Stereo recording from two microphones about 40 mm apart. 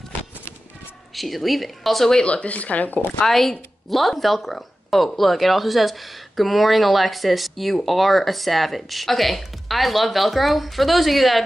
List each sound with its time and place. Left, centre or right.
1.1 s speech: centre
2.2 s speech: left
3.3 s speech: centre